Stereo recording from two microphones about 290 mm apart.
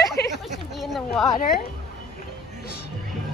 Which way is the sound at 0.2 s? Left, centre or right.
Left.